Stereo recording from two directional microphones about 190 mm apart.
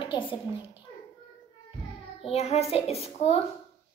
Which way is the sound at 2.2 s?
35° left (ahead or behind).